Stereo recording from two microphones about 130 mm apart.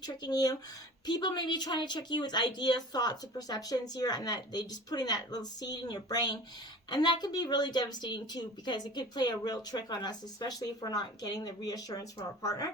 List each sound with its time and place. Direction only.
0.0 s speech: 30° left (ahead or behind)